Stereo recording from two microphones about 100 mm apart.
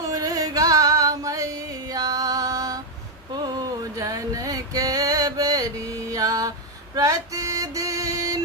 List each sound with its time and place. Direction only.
0.1 s music: 35° right (ahead or behind)
3.3 s a sound: 45° right (ahead or behind)
6.9 s female singing: 35° right (ahead or behind)